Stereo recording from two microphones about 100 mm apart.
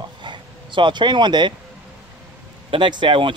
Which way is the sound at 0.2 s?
55° right (ahead or behind).